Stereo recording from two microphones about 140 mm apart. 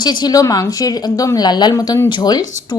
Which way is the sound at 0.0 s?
30° left (ahead or behind).